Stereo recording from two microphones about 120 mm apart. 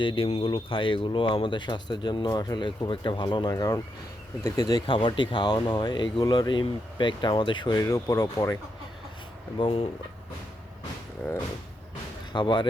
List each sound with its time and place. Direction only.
0.0 s speech: 45° left (ahead or behind)
7.8 s speech: 30° left (ahead or behind)
9.6 s speech: 55° left (ahead or behind)
12.3 s speech: 40° left (ahead or behind)